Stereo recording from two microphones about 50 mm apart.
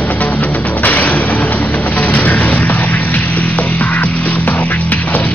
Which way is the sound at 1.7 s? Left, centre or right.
Left.